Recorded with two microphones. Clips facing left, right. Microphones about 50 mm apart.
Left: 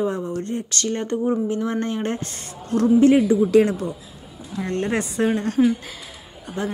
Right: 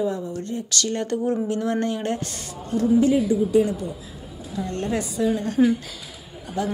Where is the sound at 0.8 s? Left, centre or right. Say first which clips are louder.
Left 2 dB; left.